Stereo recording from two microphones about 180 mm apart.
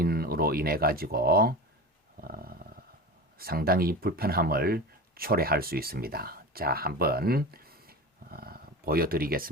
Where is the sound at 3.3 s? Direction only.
55° right (ahead or behind).